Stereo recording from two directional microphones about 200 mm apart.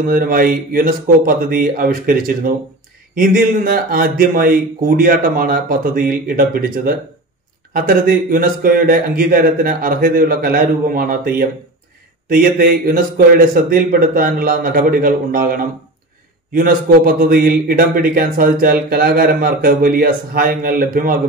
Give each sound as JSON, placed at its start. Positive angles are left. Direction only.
{"t": 0.0, "sound": "a man's voice", "side_deg": -45}